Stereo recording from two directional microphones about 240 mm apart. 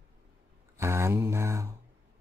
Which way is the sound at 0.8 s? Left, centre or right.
Centre.